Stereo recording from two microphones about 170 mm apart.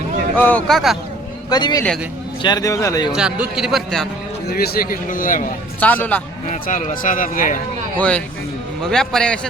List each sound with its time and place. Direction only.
0.3 s a man's voice: 10° left (ahead or behind)
1.5 s speech: 25° left (ahead or behind)
3.2 s a man's voice: 5° right (ahead or behind)
4.5 s speech: 60° left (ahead or behind)
5.8 s a man's voice: 10° left (ahead or behind)
6.5 s speech: 50° left (ahead or behind)
7.9 s a man's voice: 5° left (ahead or behind)